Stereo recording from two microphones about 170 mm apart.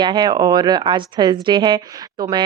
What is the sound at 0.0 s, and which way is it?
Speech, 25° right (ahead or behind).